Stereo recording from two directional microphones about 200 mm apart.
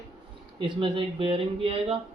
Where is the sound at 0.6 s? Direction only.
25° right (ahead or behind).